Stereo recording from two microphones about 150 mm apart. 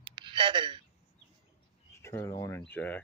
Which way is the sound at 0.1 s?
35° right (ahead or behind).